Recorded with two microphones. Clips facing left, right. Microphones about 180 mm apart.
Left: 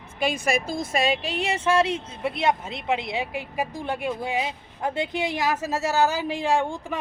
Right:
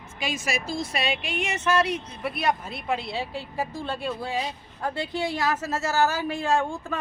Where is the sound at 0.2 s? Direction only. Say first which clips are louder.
Left 5 dB; 55° left (ahead or behind).